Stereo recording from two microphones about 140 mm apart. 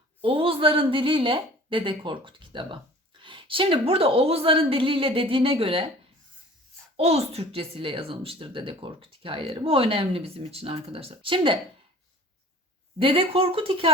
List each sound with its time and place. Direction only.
0.2 s a woman's voice: 40° right (ahead or behind)
6.9 s speech: 45° right (ahead or behind)
13.0 s speech: 40° right (ahead or behind)